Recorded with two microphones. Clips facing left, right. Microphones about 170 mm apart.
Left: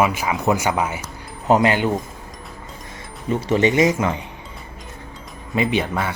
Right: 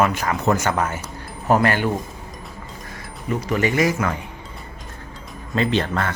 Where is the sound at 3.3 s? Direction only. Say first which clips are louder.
Left 3 dB; 25° left (ahead or behind).